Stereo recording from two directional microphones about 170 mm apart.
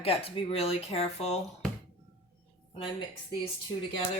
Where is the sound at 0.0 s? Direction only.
35° left (ahead or behind).